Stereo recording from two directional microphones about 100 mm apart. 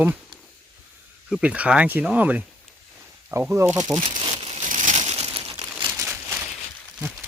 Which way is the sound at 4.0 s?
55° right (ahead or behind).